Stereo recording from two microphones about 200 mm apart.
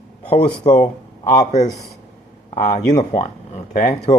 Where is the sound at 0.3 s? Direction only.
30° left (ahead or behind).